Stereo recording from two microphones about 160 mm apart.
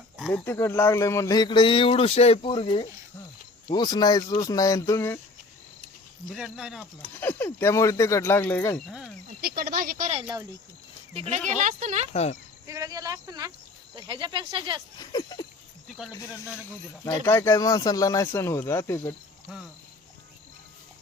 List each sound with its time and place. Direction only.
0.2 s speech: centre (ahead or behind)
0.4 s speech: 15° left (ahead or behind)
6.3 s speech: 5° right (ahead or behind)
7.2 s speech: 15° left (ahead or behind)
8.9 s speech: 5° right (ahead or behind)
9.4 s speech: 70° right (ahead or behind)
10.1 s speech: 40° right (ahead or behind)
12.1 s speech: 45° left (ahead or behind)
12.6 s speech: 20° right (ahead or behind)
14.9 s speech: 25° left (ahead or behind)
17.2 s speech: 15° left (ahead or behind)